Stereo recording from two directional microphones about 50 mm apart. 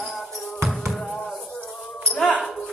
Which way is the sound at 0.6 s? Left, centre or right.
Centre.